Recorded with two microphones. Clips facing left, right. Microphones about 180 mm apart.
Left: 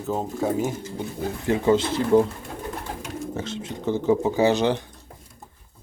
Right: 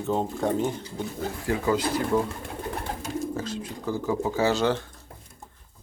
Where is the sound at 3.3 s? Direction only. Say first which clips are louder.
Left 1 dB; 25° left (ahead or behind).